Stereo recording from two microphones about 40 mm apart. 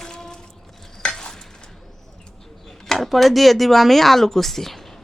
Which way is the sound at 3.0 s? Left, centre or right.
Centre.